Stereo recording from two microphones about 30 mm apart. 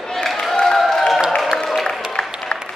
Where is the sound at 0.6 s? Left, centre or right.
Centre.